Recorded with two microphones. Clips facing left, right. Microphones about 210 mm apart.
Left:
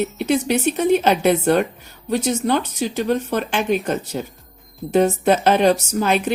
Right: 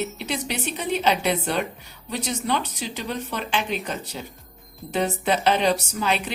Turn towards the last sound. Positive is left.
turn(degrees=50)  # may be behind; listen again after turning